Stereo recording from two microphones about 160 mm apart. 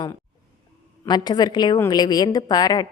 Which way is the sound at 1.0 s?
25° left (ahead or behind).